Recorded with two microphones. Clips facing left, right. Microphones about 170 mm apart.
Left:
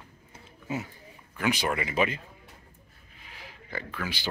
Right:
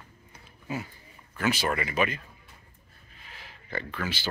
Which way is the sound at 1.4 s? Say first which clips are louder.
Even; 15° left (ahead or behind).